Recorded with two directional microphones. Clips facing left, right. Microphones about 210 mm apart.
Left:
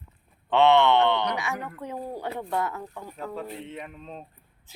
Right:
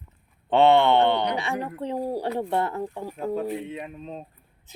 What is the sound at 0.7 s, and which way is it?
Speech, 30° right (ahead or behind).